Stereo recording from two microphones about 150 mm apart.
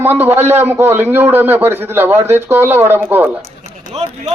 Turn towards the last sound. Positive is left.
turn(degrees=-40)  # may be behind; listen again after turning